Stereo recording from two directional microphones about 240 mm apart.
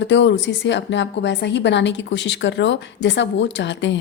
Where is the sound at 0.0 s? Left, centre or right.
Left.